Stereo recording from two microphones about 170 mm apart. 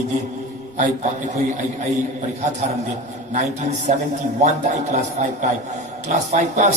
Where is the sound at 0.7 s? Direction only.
45° right (ahead or behind).